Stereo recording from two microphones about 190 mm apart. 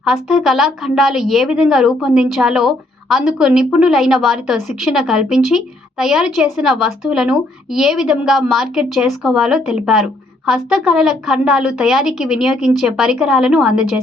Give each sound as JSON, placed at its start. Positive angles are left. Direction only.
{"t": 0.0, "sound": "a woman's voice", "side_deg": 0}